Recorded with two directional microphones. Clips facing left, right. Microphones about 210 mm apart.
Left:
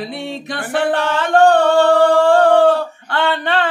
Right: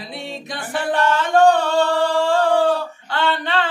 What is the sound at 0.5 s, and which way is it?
Singing, 60° left (ahead or behind).